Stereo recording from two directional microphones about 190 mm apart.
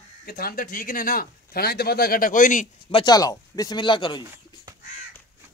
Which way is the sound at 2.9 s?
25° left (ahead or behind).